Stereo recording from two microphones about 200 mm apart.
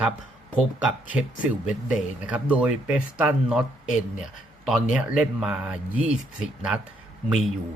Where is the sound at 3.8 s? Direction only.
40° left (ahead or behind).